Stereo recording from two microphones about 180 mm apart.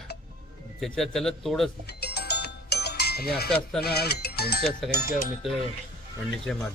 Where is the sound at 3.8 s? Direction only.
60° left (ahead or behind).